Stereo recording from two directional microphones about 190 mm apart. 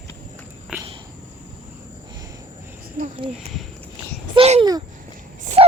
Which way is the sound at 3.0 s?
45° right (ahead or behind).